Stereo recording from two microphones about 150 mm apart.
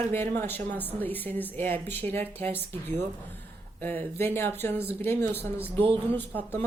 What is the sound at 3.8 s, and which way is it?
Speech, 10° left (ahead or behind).